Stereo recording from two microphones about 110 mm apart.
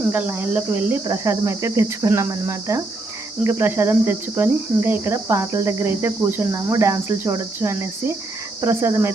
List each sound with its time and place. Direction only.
0.1 s speech: 15° right (ahead or behind)
1.0 s speech: 30° right (ahead or behind)